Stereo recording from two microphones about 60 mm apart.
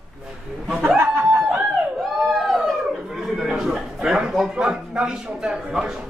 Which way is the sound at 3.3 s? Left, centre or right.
Centre.